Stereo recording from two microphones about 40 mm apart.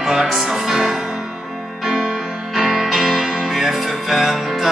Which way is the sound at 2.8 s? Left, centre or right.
Centre.